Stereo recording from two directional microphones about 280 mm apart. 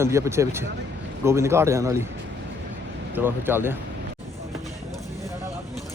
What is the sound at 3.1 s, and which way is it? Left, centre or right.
Speech, centre.